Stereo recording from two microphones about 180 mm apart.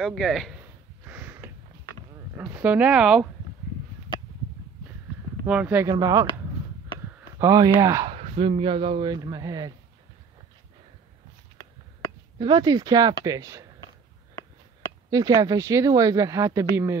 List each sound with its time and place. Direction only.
0.0 s speech: centre (ahead or behind)
1.0 s a sound: 10° right (ahead or behind)
2.4 s speech: 10° right (ahead or behind)
5.4 s speech: 10° right (ahead or behind)
7.3 s speech: 20° right (ahead or behind)
8.1 s speech: 35° right (ahead or behind)
12.4 s speech: 25° right (ahead or behind)
15.0 s speech: 20° right (ahead or behind)